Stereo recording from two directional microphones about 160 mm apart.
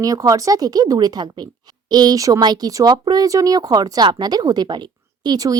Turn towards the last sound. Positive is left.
turn(degrees=-25)  # may be behind; listen again after turning